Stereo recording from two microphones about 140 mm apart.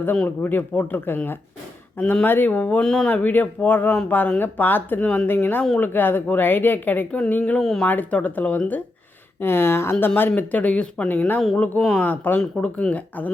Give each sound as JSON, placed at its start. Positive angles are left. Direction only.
{"t": 0.0, "sound": "speech", "side_deg": 10}